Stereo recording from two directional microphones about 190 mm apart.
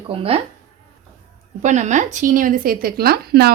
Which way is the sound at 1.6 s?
40° right (ahead or behind).